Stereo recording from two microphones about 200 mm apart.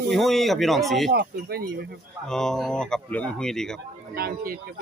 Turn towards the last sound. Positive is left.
turn(degrees=-50)  # may be behind; listen again after turning